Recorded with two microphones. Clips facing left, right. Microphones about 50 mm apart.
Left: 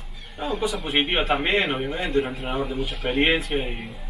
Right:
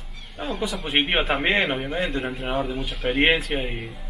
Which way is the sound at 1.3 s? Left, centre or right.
Centre.